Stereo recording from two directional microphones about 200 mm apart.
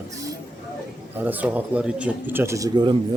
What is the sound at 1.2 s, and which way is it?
A man's voice, 10° right (ahead or behind).